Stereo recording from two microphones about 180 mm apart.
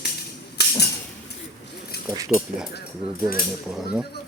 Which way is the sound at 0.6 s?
65° left (ahead or behind).